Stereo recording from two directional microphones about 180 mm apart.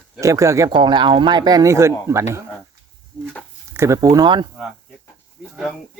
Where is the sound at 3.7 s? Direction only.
15° right (ahead or behind).